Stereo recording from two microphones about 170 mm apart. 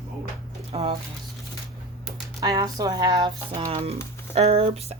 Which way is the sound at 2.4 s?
20° right (ahead or behind).